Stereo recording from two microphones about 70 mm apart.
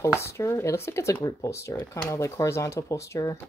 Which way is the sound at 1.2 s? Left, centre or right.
Left.